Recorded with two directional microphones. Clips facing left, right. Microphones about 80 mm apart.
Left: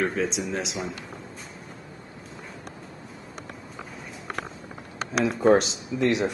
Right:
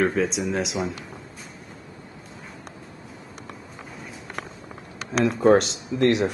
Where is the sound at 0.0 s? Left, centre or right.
Centre.